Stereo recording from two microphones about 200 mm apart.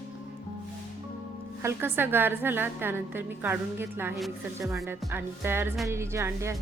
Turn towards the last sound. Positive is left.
turn(degrees=-15)  # may be behind; listen again after turning